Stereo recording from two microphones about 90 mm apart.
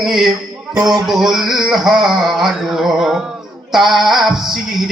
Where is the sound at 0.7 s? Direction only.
45° right (ahead or behind).